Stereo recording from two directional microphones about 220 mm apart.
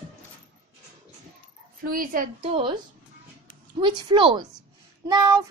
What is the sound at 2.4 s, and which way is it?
A child's voice, 25° right (ahead or behind).